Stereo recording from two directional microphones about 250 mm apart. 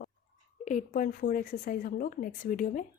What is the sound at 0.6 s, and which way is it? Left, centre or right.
Speech, left.